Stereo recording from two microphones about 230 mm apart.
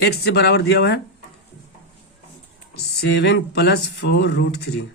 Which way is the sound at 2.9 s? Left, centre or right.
Left.